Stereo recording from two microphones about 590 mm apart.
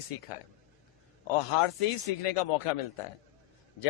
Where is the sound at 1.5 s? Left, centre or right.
Left.